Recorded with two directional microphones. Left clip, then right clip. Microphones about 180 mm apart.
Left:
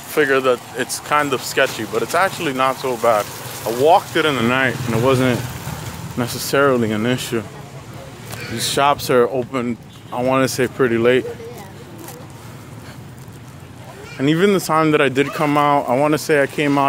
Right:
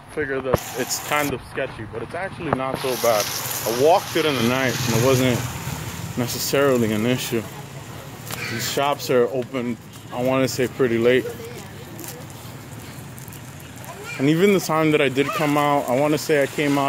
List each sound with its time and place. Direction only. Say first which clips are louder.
0.1 s speech: left 8 dB; 5° left (ahead or behind)
8.5 s speech: left 6 dB; 15° left (ahead or behind)
14.2 s speech: left 2 dB; centre (ahead or behind)